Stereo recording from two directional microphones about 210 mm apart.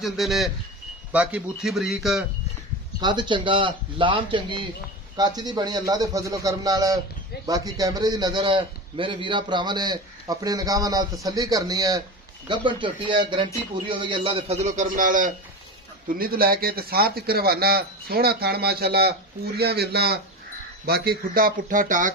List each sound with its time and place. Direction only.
0.0 s speech: centre (ahead or behind)
3.0 s a man's voice: 20° right (ahead or behind); by 22.1 s 40° right (ahead or behind)